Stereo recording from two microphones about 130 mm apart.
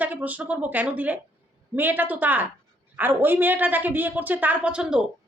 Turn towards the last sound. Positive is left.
turn(degrees=-5)  # may be behind; listen again after turning